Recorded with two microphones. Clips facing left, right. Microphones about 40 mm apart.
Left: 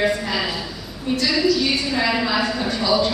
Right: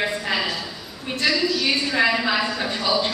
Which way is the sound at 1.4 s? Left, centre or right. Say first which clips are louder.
Left 3 dB; centre.